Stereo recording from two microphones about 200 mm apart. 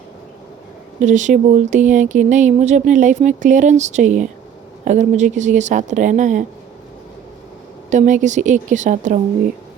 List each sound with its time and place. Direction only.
1.0 s speech: 40° right (ahead or behind)
7.9 s speech: 35° right (ahead or behind)